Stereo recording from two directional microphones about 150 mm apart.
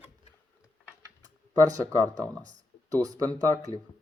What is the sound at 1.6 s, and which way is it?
Speech, 25° right (ahead or behind).